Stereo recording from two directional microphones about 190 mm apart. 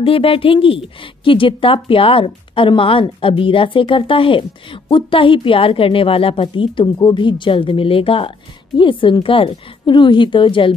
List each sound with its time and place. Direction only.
0.0 s a woman's voice: 30° left (ahead or behind)